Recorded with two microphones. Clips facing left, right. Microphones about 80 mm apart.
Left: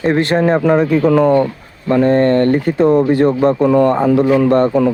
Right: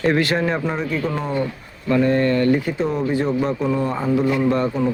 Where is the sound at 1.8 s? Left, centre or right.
Left.